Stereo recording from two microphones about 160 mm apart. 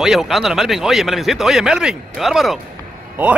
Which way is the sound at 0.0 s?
Centre (ahead or behind).